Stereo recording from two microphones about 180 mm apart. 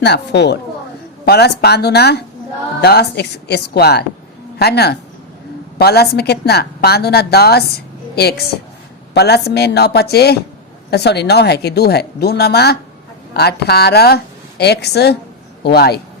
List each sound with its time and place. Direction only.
0.0 s a woman's voice: 70° left (ahead or behind)